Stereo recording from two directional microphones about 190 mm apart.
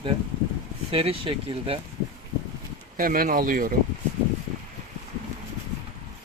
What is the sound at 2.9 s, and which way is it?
Speech, 50° right (ahead or behind).